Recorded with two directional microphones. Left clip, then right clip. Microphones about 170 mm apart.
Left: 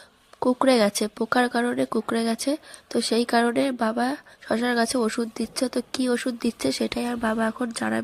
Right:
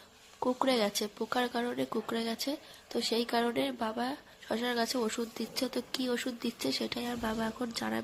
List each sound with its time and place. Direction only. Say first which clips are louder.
0.3 s speech: left 10 dB; 40° left (ahead or behind)